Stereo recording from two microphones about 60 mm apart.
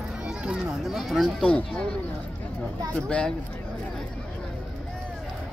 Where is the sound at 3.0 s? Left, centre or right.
Centre.